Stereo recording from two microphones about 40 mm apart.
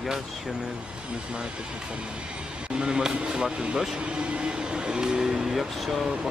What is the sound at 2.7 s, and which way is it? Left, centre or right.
Speech, centre.